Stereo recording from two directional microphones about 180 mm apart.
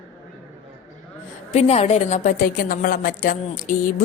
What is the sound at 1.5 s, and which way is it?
A woman's voice, 35° left (ahead or behind).